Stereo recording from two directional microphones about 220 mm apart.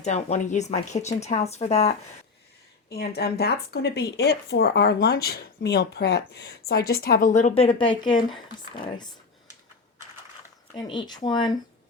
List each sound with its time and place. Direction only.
0.0 s speech: 30° left (ahead or behind)
2.9 s speech: 45° left (ahead or behind); by 8.2 s 20° left (ahead or behind)
10.8 s speech: 20° left (ahead or behind)